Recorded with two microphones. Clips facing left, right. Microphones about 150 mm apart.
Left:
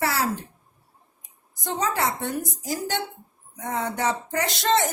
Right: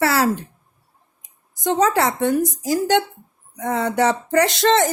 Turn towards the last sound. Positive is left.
turn(degrees=-90)